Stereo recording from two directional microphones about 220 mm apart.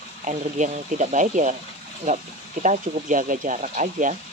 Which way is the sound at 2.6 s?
35° right (ahead or behind).